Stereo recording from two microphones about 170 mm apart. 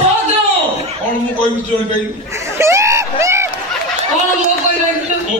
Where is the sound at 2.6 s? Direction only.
15° right (ahead or behind).